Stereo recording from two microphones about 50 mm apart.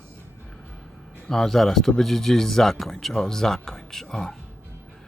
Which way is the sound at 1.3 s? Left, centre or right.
Centre.